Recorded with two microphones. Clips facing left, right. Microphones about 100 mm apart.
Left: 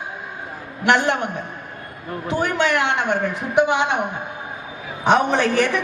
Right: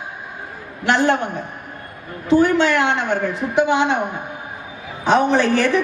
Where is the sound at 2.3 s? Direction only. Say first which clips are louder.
Right 6 dB; 35° right (ahead or behind).